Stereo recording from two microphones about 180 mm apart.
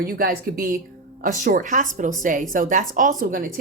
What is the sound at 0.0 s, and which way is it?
A woman's voice, 55° right (ahead or behind).